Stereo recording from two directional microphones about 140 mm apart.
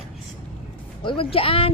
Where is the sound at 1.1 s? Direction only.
40° left (ahead or behind).